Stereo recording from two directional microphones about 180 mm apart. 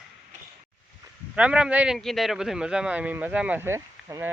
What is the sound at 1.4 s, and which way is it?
Speech, 5° right (ahead or behind).